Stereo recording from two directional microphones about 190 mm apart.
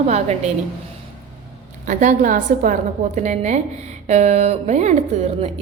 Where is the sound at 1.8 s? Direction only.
40° right (ahead or behind).